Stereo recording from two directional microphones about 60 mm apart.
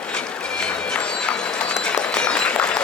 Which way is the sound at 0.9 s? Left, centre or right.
Centre.